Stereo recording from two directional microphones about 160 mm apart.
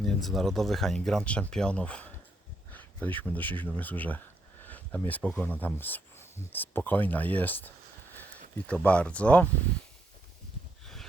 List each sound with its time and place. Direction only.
0.0 s speech: centre (ahead or behind)